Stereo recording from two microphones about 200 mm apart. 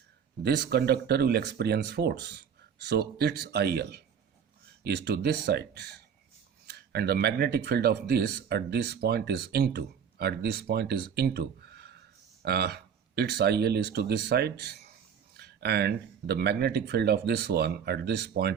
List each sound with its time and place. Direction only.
0.4 s speech: 55° right (ahead or behind)